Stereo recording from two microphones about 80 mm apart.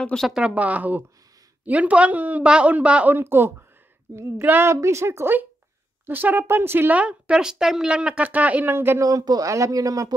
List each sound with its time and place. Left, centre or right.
0.1 s speech: centre
0.6 s a woman's voice: centre
3.2 s a woman's voice: right
9.0 s speech: right